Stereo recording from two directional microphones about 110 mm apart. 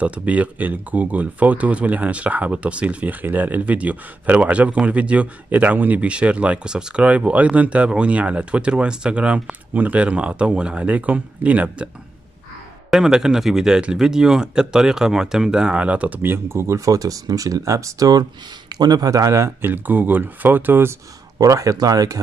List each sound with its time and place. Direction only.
0.0 s speech: 10° right (ahead or behind)
12.9 s speech: 5° right (ahead or behind)
21.4 s speech: 30° right (ahead or behind)